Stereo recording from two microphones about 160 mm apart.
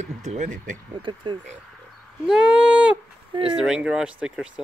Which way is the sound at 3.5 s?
5° right (ahead or behind).